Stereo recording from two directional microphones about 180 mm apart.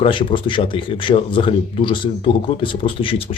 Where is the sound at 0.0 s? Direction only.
30° left (ahead or behind).